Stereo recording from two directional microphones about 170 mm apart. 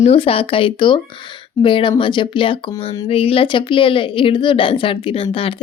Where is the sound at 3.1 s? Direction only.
35° left (ahead or behind).